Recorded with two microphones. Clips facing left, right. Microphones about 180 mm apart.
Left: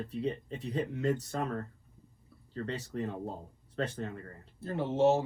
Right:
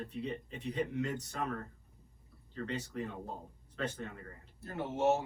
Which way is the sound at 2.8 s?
35° left (ahead or behind).